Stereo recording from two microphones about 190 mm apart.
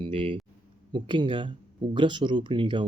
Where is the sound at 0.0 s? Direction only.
25° right (ahead or behind).